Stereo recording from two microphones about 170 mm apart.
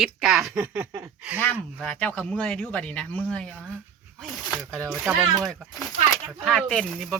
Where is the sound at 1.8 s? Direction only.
5° left (ahead or behind).